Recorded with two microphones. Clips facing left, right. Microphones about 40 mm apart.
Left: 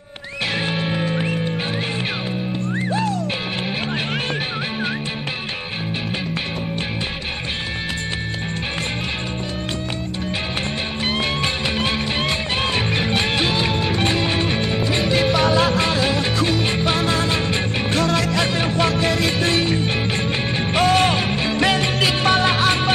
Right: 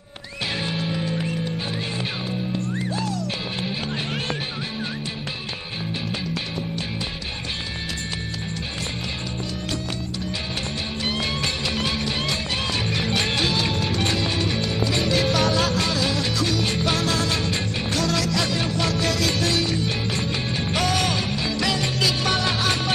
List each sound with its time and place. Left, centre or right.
0.7 s music: left
2.7 s music: left
11.1 s music: left